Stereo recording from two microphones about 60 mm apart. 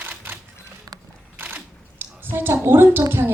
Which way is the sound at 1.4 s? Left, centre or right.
Right.